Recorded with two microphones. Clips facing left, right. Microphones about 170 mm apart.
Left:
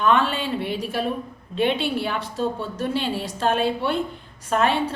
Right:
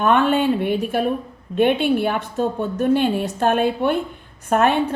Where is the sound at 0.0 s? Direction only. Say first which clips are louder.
Right 4 dB; 55° right (ahead or behind).